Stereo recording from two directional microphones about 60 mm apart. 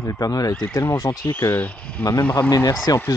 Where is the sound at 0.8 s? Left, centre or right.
Left.